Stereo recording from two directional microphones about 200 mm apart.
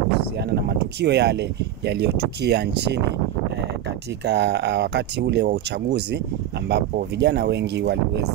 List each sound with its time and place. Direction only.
0.5 s speech: 55° right (ahead or behind)
4.3 s speech: 60° right (ahead or behind)